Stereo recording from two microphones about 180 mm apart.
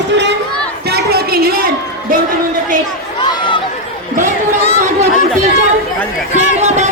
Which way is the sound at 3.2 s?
25° left (ahead or behind).